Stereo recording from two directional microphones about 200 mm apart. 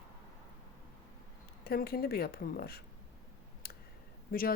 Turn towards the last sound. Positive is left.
turn(degrees=45)  # may be behind; listen again after turning